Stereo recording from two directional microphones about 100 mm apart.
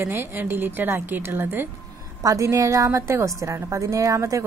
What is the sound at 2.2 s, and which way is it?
Speech, 35° right (ahead or behind).